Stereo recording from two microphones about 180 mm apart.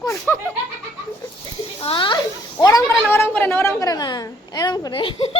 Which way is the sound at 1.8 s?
30° left (ahead or behind).